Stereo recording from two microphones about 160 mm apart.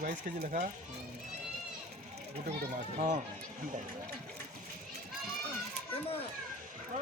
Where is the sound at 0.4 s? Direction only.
55° right (ahead or behind).